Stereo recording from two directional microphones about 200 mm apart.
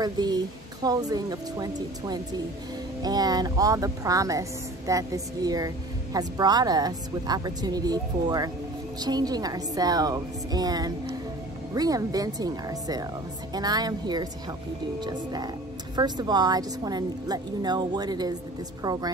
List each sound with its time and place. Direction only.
0.0 s a woman's voice: 20° right (ahead or behind)